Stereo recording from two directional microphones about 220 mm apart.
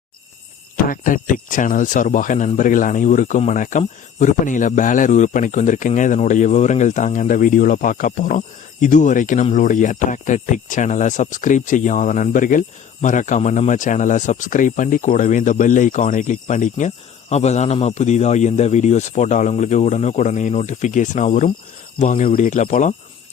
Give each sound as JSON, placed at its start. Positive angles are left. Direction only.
{"t": 0.9, "sound": "speech", "side_deg": 40}